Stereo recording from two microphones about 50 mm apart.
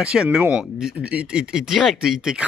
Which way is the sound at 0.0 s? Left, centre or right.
Centre.